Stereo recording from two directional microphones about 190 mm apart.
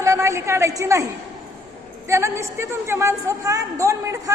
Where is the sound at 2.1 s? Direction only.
15° right (ahead or behind).